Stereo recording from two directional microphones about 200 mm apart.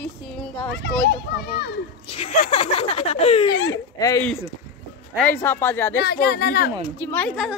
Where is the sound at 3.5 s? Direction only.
65° left (ahead or behind).